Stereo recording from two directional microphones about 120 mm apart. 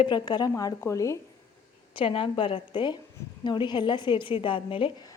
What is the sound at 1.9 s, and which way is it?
A woman's voice, 50° left (ahead or behind).